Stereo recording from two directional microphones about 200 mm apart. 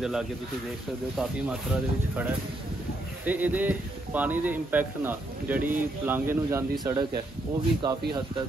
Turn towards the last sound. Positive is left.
turn(degrees=-20)  # may be behind; listen again after turning